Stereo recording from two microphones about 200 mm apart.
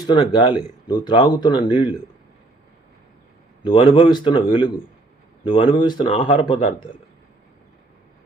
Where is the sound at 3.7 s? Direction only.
25° left (ahead or behind).